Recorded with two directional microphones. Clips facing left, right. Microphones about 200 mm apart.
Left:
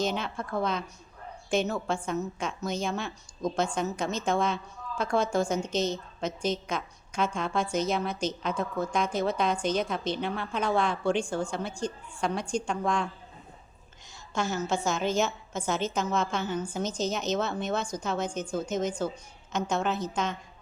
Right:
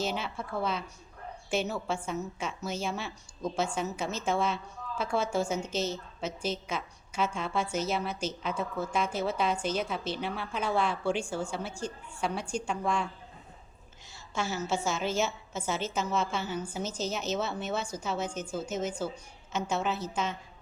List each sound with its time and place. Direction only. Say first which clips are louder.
0.0 s a woman's voice: left 3 dB; 5° right (ahead or behind)
14.3 s a woman's voice: left 2 dB; 5° right (ahead or behind)